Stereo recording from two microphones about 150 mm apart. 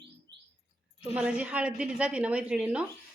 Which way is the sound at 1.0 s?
10° right (ahead or behind).